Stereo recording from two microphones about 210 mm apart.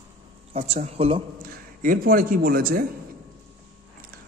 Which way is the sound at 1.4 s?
40° right (ahead or behind).